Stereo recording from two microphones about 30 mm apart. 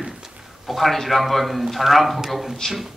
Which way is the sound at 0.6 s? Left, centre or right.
Centre.